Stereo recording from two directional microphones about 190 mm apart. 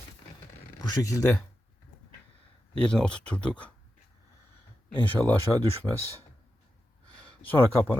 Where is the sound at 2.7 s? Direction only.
5° left (ahead or behind).